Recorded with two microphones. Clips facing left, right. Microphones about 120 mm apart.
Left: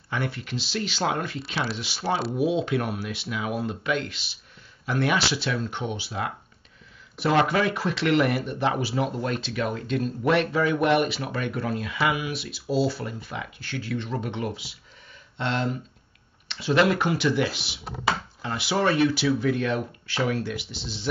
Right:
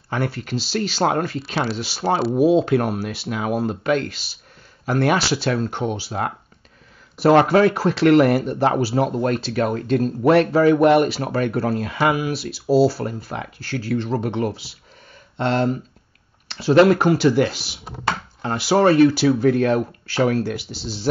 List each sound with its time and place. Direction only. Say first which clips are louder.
0.1 s speech: right 6 dB; 40° right (ahead or behind)